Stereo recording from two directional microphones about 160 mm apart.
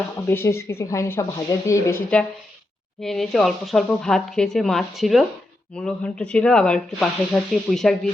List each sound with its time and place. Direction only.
0.3 s speech: 15° left (ahead or behind)